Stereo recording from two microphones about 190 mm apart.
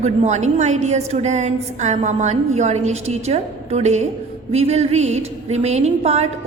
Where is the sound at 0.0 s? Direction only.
35° right (ahead or behind).